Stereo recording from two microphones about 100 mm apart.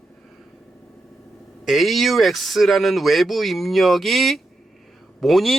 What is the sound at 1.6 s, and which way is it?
Speech, centre (ahead or behind).